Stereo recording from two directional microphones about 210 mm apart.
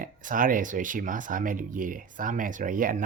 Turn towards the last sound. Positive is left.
turn(degrees=-40)  # may be behind; listen again after turning